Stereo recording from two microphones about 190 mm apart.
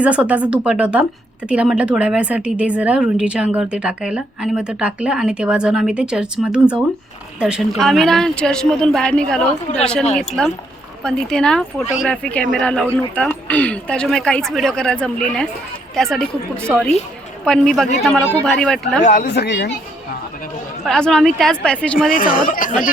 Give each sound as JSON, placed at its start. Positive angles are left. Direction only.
{"t": 0.0, "sound": "speech", "side_deg": -5}
{"t": 17.4, "sound": "speech", "side_deg": 5}
{"t": 19.0, "sound": "speech", "side_deg": 40}
{"t": 19.3, "sound": "speech", "side_deg": 60}
{"t": 20.8, "sound": "speech", "side_deg": 5}
{"t": 22.1, "sound": "speech", "side_deg": 45}